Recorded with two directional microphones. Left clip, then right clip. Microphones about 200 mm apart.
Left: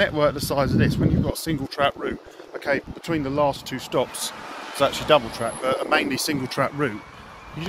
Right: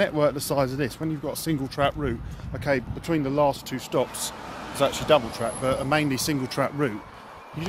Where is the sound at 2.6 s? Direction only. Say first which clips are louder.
Left 1 dB; 10° right (ahead or behind).